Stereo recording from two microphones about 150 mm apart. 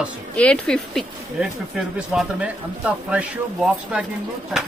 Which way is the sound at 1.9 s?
5° right (ahead or behind).